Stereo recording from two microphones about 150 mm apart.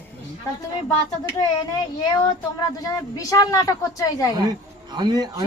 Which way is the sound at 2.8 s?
25° left (ahead or behind).